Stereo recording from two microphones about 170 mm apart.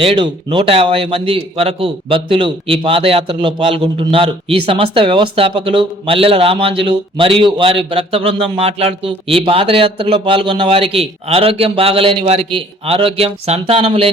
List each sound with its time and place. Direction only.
0.0 s a man's voice: 30° right (ahead or behind)